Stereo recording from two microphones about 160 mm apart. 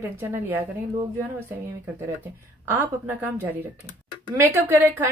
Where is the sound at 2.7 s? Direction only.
10° right (ahead or behind).